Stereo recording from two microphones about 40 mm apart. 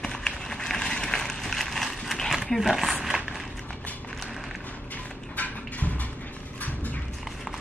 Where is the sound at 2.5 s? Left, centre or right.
Centre.